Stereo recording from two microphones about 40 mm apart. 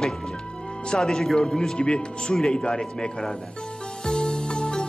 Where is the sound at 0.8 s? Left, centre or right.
Centre.